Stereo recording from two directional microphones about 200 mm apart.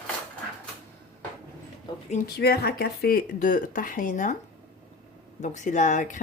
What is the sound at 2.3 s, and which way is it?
Speech, 50° left (ahead or behind).